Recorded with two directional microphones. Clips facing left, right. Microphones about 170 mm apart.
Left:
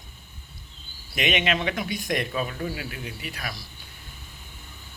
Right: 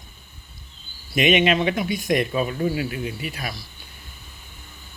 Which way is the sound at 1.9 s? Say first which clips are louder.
Right 6 dB; 5° right (ahead or behind).